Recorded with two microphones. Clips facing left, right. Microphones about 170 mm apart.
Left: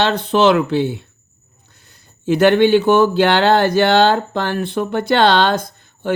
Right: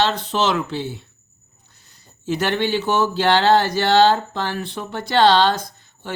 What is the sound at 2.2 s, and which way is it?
Speech, 55° left (ahead or behind).